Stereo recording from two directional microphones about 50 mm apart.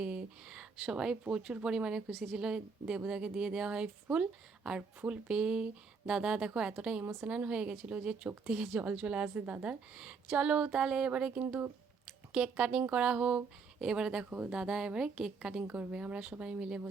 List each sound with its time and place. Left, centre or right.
0.0 s a sound: right
0.8 s a woman's voice: centre
7.0 s a woman's voice: right
7.3 s speech: right
8.4 s a woman's voice: centre
8.8 s a woman's voice: right
14.3 s speech: right
14.5 s a woman's voice: centre
15.6 s speech: right